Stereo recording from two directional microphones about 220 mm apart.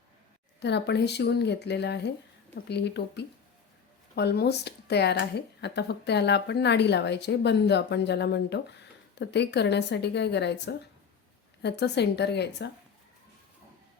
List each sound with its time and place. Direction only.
0.6 s speech: 50° left (ahead or behind)